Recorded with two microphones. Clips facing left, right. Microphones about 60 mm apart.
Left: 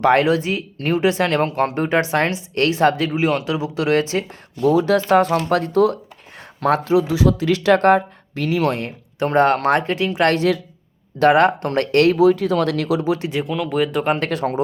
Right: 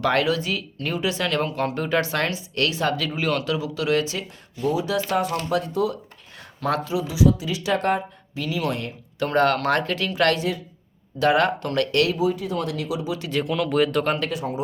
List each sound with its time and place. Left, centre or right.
0.0 s speech: left
3.1 s speech: left
4.6 s speech: left
10.3 s speech: left
11.2 s speech: left
12.1 s speech: left
13.4 s speech: centre
14.2 s speech: left